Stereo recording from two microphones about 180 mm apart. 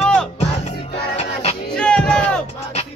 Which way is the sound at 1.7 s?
5° left (ahead or behind).